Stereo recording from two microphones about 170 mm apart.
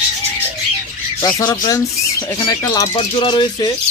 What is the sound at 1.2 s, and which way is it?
Speech, 25° left (ahead or behind).